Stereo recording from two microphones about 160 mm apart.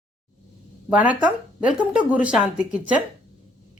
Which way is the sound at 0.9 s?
10° right (ahead or behind).